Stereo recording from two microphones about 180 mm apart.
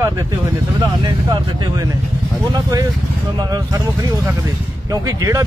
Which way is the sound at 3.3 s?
20° right (ahead or behind).